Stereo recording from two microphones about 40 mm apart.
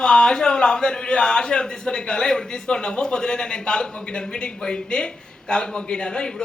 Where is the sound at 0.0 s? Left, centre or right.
Left.